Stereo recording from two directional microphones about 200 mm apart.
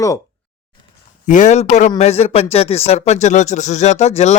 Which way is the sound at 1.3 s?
35° left (ahead or behind).